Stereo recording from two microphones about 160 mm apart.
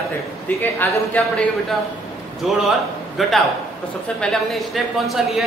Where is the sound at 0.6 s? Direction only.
10° left (ahead or behind).